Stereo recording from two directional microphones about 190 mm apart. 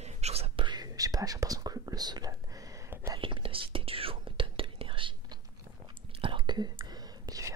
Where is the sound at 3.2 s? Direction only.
30° right (ahead or behind).